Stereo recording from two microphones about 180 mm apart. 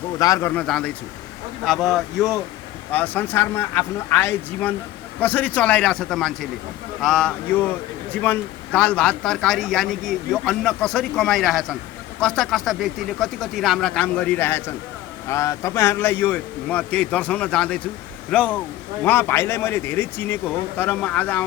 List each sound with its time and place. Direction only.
0.2 s a man's voice: 20° left (ahead or behind)
0.6 s a man's voice: 5° left (ahead or behind)